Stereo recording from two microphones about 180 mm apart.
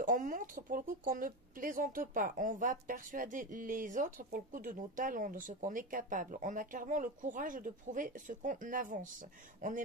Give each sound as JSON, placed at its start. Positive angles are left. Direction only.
{"t": 0.0, "sound": "speech", "side_deg": -45}